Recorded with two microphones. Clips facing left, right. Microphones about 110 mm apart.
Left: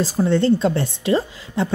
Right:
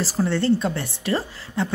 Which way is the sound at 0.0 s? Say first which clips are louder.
Left 4 dB; 20° left (ahead or behind).